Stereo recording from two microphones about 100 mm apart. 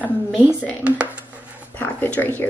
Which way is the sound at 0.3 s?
15° right (ahead or behind).